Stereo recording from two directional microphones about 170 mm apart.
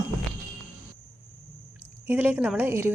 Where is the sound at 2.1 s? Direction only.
10° right (ahead or behind).